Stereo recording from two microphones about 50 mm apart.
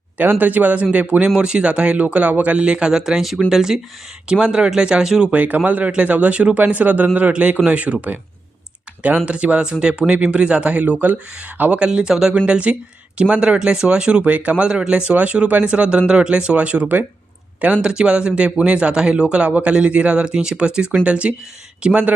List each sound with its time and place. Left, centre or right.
0.2 s speech: right
1.4 s speech: right
5.3 s speech: right
9.0 s speech: right
11.9 s speech: centre
12.5 s speech: right
14.3 s speech: right
14.7 s speech: centre
17.8 s speech: centre